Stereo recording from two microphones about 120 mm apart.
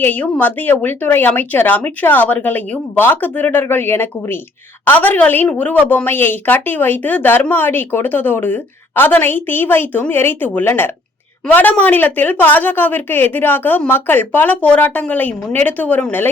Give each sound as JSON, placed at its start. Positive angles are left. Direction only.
{"t": 0.0, "sound": "a woman's voice", "side_deg": 15}